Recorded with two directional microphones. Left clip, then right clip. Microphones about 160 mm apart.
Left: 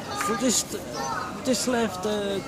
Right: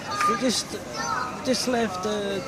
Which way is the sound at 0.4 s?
30° left (ahead or behind).